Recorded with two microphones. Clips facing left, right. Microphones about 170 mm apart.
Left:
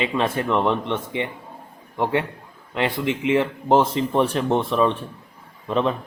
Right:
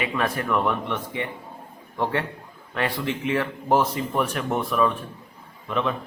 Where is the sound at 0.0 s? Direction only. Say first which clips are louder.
Left 3 dB; 25° left (ahead or behind).